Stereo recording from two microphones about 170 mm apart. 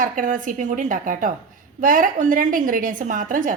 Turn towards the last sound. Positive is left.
turn(degrees=-50)  # may be behind; listen again after turning